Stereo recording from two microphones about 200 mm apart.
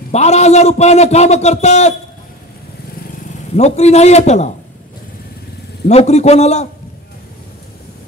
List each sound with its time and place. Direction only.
0.1 s a man's voice: 35° left (ahead or behind)
3.5 s a man's voice: 35° left (ahead or behind)
5.9 s a man's voice: 35° left (ahead or behind)